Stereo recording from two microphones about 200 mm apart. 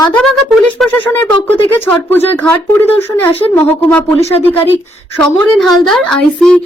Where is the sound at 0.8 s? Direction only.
Centre (ahead or behind).